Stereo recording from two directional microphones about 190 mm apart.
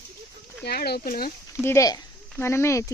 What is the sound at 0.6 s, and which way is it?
Speech, 55° left (ahead or behind).